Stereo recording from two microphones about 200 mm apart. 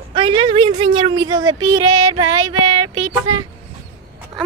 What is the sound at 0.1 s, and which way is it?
A woman's voice, 25° right (ahead or behind).